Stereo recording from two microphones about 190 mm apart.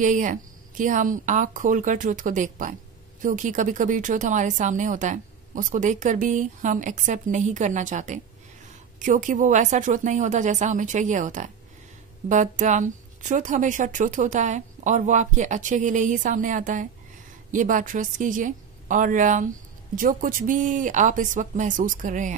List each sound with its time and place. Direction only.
0.0 s speech: 40° right (ahead or behind)